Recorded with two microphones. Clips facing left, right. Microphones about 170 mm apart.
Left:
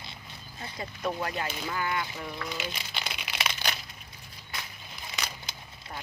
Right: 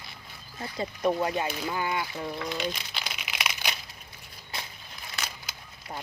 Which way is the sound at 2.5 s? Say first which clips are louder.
Right 4 dB; centre (ahead or behind).